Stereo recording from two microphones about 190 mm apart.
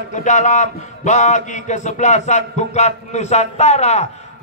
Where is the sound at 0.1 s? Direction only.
40° left (ahead or behind).